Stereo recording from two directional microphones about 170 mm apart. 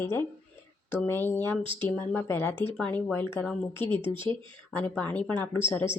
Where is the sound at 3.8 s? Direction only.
30° right (ahead or behind).